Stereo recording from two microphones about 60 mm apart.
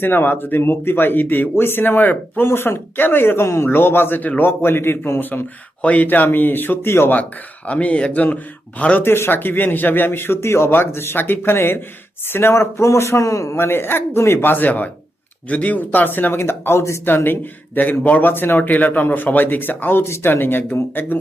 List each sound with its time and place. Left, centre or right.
0.0 s speech: left
5.8 s speech: left
7.7 s speech: left
9.0 s a man's voice: left
17.1 s speech: left